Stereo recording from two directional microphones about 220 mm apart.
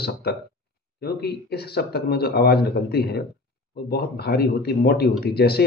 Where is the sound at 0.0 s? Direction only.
45° left (ahead or behind).